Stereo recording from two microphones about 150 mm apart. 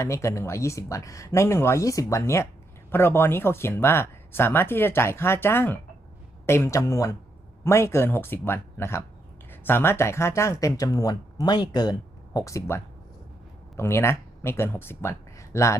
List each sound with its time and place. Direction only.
0.0 s speech: 20° left (ahead or behind)